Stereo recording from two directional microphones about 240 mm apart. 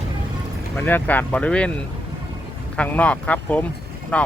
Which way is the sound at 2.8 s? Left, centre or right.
Centre.